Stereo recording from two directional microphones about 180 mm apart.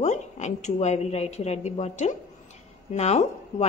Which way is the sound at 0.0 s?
40° left (ahead or behind).